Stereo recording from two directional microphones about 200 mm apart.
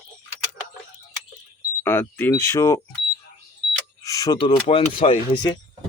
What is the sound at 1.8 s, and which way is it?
Speech, 10° left (ahead or behind).